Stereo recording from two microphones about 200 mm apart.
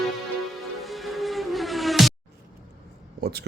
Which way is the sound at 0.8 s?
Centre (ahead or behind).